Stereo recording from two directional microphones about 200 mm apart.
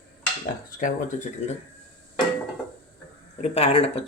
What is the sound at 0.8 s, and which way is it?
Speech, 40° left (ahead or behind).